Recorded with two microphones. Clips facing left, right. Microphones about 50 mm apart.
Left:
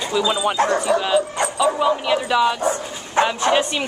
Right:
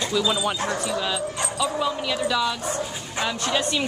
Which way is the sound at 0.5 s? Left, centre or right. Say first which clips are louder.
Left 8 dB; left.